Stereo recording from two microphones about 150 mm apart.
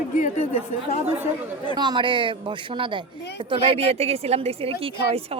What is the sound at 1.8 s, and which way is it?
A woman's voice, 30° right (ahead or behind).